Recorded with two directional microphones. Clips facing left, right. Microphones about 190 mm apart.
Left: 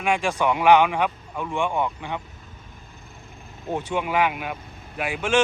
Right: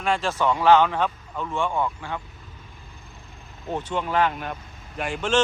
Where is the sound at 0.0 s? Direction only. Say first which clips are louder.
Left 1 dB; 15° left (ahead or behind).